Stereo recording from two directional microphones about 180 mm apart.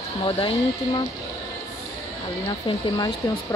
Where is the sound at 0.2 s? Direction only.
30° left (ahead or behind).